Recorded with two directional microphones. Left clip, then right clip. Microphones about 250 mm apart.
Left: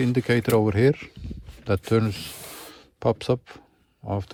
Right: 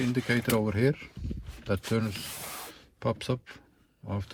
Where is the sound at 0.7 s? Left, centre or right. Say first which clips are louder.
Left 7 dB; left.